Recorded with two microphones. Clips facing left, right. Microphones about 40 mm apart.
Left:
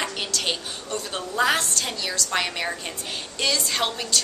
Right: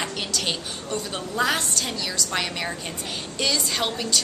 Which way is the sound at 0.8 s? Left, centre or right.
Centre.